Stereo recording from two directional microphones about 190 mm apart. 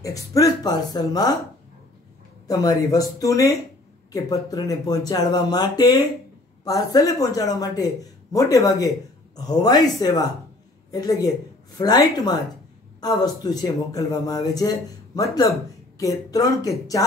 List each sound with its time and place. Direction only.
0.0 s speech: 15° left (ahead or behind)
2.4 s speech: 20° left (ahead or behind)